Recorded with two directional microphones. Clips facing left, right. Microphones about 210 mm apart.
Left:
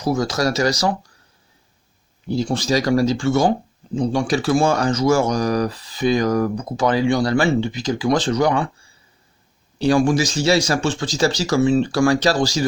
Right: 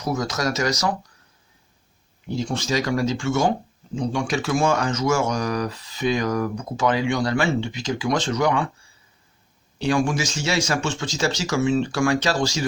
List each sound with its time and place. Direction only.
0.0 s speech: 30° left (ahead or behind)
2.2 s speech: 35° left (ahead or behind)
9.7 s speech: 35° left (ahead or behind)